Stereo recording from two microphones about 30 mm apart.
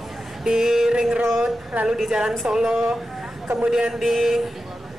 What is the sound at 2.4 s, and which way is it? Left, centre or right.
Speech, right.